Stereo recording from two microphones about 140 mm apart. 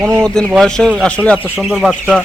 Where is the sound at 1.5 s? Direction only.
Centre (ahead or behind).